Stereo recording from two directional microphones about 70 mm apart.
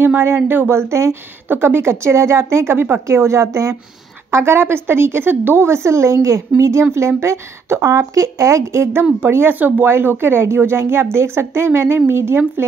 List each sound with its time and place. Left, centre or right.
0.0 s a woman's voice: right
3.1 s a woman's voice: right
9.2 s a woman's voice: right